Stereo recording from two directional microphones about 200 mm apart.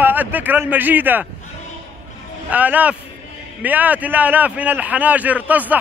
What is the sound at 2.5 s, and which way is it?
A man's voice, 10° right (ahead or behind).